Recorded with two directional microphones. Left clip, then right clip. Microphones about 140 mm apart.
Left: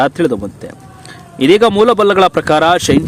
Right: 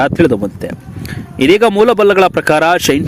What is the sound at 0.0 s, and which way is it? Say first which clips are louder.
Speech: right 2 dB; 15° right (ahead or behind).